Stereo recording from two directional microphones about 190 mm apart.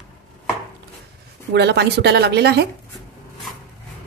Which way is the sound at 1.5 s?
65° right (ahead or behind).